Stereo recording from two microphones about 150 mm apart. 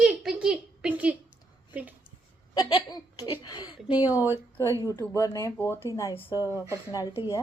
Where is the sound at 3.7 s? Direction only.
10° right (ahead or behind).